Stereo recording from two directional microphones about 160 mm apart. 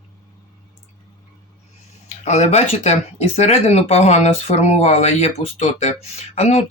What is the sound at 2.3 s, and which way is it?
Speech, 45° left (ahead or behind).